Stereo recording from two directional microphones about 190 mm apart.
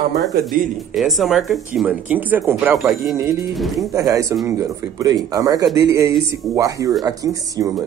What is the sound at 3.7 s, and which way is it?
Speech, 20° right (ahead or behind).